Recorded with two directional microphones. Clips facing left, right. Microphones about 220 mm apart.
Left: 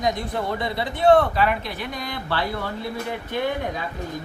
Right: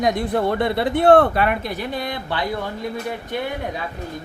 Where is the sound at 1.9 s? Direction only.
25° right (ahead or behind).